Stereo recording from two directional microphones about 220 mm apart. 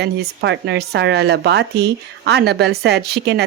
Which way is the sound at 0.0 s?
50° right (ahead or behind).